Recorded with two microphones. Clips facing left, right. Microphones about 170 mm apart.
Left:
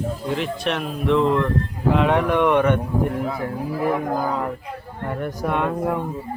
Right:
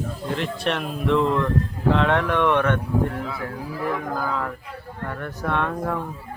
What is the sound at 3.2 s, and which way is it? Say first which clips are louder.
Speech: left 5 dB; 40° left (ahead or behind).